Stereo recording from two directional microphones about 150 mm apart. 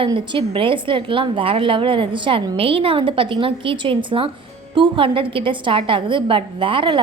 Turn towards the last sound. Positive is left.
turn(degrees=-35)  # may be behind; listen again after turning